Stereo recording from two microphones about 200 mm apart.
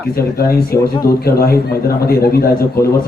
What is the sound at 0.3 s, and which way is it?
Speech, 50° left (ahead or behind).